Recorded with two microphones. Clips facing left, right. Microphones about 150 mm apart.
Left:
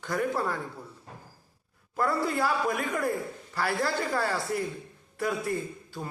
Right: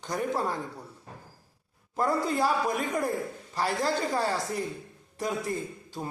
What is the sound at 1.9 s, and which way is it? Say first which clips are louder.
A man's voice: right 1 dB; 20° right (ahead or behind).